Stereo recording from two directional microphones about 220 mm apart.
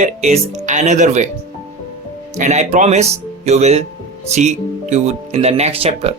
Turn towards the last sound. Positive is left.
turn(degrees=-25)  # may be behind; listen again after turning